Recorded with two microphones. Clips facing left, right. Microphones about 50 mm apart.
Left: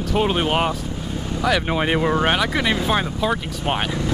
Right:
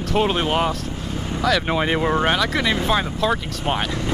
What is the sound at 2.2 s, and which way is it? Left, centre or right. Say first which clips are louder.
Speech: even; centre.